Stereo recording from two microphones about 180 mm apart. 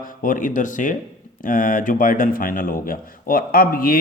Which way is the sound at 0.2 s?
50° left (ahead or behind).